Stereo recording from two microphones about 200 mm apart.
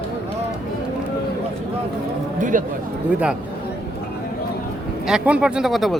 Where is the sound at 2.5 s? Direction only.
40° right (ahead or behind).